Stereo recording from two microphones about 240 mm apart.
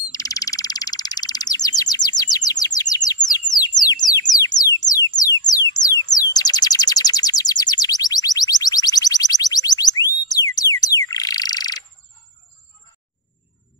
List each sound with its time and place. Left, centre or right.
0.1 s frog: centre
3.8 s a sound: centre
6.3 s bird: centre